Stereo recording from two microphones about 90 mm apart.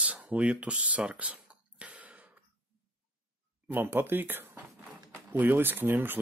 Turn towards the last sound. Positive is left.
turn(degrees=-20)  # may be behind; listen again after turning